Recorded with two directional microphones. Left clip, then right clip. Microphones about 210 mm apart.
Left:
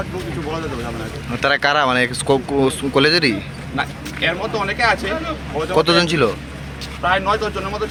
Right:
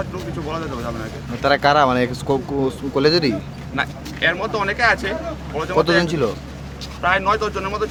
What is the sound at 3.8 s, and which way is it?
Speech, 25° right (ahead or behind).